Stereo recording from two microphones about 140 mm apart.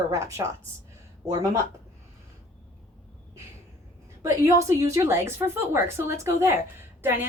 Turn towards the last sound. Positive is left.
turn(degrees=-15)  # may be behind; listen again after turning